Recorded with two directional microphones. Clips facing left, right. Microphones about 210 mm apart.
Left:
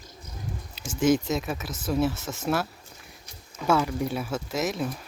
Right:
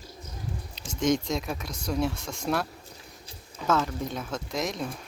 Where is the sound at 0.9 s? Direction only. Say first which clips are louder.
Left 3 dB; 5° left (ahead or behind).